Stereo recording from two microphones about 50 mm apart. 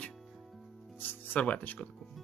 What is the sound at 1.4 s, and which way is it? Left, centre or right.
Speech, left.